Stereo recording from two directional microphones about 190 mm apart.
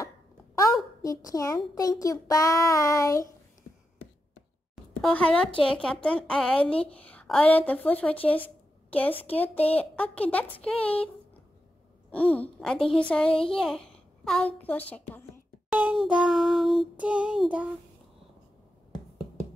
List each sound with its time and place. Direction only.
1.0 s a woman's voice: 15° left (ahead or behind)
5.0 s a woman's voice: 5° left (ahead or behind)
12.1 s a woman's voice: 5° left (ahead or behind)
15.7 s child singing: 5° right (ahead or behind)